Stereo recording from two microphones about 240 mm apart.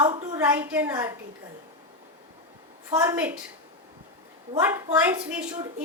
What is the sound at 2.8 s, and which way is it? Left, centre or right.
Speech, centre.